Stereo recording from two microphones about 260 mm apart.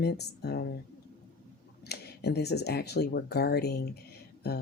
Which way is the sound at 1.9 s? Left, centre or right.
Left.